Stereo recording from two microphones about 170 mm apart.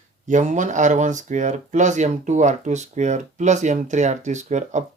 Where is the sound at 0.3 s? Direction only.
45° right (ahead or behind).